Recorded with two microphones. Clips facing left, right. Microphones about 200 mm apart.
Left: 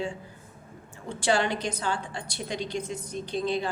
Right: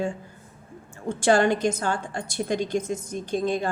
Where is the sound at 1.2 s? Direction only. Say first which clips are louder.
Right 6 dB; 50° right (ahead or behind).